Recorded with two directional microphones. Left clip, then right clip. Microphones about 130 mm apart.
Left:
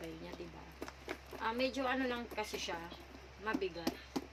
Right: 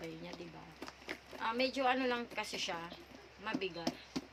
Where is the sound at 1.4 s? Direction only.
20° right (ahead or behind).